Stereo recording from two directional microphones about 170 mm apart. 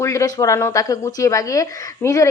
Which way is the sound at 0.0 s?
20° left (ahead or behind).